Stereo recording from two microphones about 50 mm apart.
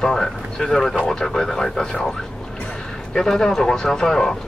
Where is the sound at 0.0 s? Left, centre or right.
Centre.